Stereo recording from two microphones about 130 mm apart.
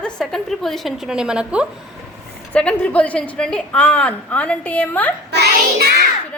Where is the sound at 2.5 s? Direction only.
10° left (ahead or behind).